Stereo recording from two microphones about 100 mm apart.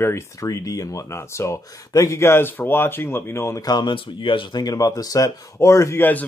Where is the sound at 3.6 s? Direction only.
50° left (ahead or behind); by 6.0 s 30° left (ahead or behind).